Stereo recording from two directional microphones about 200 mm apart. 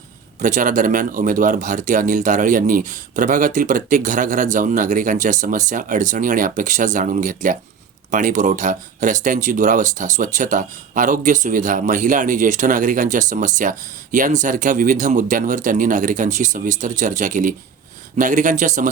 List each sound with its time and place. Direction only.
0.4 s speech: 40° right (ahead or behind)